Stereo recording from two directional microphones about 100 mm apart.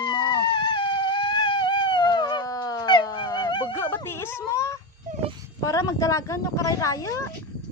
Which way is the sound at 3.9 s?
25° left (ahead or behind).